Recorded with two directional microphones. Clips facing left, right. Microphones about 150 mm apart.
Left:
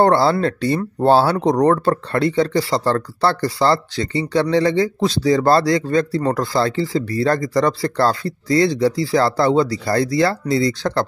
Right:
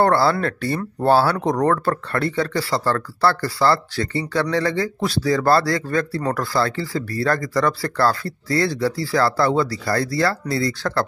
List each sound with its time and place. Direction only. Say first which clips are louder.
0.0 s speech: left 3 dB; 25° left (ahead or behind)